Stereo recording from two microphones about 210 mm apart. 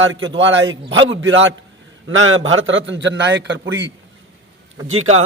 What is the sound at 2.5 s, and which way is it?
A man's voice, 65° right (ahead or behind).